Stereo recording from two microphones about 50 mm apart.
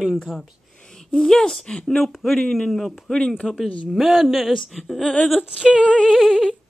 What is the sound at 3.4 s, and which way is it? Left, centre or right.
Female singing, centre.